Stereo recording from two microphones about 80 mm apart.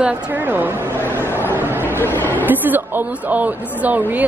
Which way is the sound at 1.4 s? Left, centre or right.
Right.